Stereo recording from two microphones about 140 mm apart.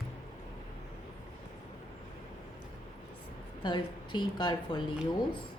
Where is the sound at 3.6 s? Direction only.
35° left (ahead or behind).